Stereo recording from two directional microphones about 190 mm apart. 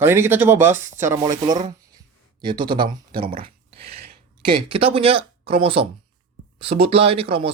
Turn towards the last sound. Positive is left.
turn(degrees=-30)  # may be behind; listen again after turning